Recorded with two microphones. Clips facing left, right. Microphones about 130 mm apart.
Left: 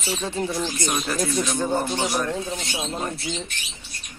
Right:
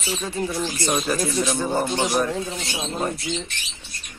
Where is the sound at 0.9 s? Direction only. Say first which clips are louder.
Right 2 dB; 10° right (ahead or behind).